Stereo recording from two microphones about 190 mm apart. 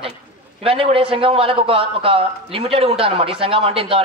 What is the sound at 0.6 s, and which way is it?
A woman's voice, 30° right (ahead or behind).